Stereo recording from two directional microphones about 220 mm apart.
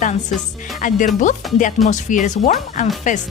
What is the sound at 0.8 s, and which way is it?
Speech, 35° left (ahead or behind).